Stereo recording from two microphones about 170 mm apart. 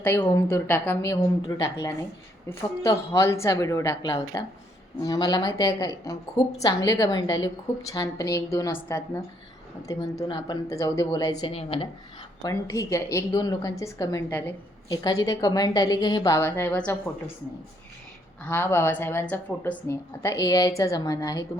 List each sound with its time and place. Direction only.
0.2 s a woman's voice: 15° left (ahead or behind)
11.5 s a woman's voice: 35° left (ahead or behind)
12.4 s a woman's voice: 20° left (ahead or behind)
14.8 s a woman's voice: 20° left (ahead or behind)
18.4 s a woman's voice: 10° left (ahead or behind)